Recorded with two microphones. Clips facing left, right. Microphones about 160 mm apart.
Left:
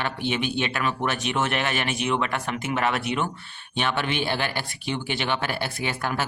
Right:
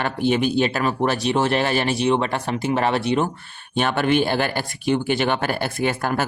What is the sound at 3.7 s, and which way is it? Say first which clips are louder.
Speech: right 7 dB; 45° right (ahead or behind).